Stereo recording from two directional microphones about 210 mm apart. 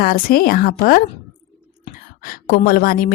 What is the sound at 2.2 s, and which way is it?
Speech, 40° left (ahead or behind).